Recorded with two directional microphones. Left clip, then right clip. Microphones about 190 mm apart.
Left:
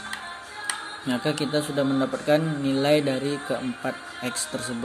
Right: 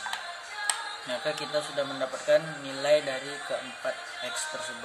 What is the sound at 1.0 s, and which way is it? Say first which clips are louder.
Speech: left 6 dB; 30° left (ahead or behind).